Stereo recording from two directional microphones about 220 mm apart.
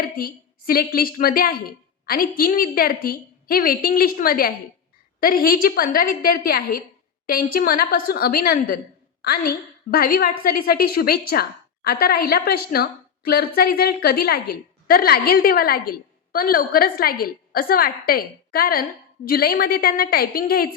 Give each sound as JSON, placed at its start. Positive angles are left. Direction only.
{"t": 0.0, "sound": "a woman's voice", "side_deg": 40}